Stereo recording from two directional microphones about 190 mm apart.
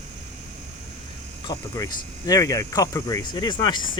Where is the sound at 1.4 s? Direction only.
20° left (ahead or behind).